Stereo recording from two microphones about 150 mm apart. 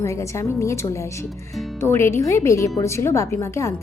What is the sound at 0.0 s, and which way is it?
Speech, 20° left (ahead or behind).